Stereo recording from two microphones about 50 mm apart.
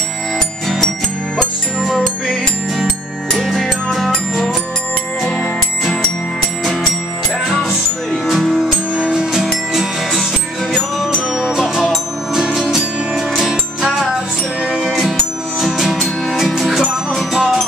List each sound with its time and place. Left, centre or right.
0.7 s music: centre
2.8 s music: centre
8.1 s music: centre
8.9 s music: centre
11.3 s music: centre
15.6 s music: centre